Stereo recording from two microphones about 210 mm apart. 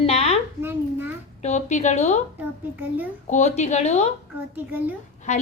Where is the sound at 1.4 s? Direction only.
35° left (ahead or behind).